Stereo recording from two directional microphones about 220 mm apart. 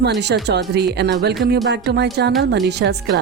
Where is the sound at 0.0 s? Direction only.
50° right (ahead or behind).